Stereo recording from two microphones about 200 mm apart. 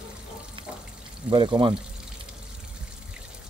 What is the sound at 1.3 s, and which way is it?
Speech, 25° right (ahead or behind).